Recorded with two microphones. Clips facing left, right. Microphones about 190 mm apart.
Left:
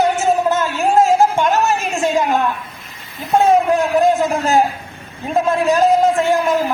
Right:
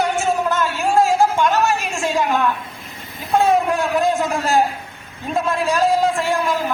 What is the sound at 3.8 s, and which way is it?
Speech, 20° left (ahead or behind).